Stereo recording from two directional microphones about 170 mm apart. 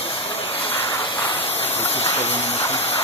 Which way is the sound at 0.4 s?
35° left (ahead or behind).